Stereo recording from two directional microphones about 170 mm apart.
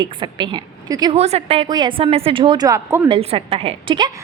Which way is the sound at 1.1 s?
35° right (ahead or behind).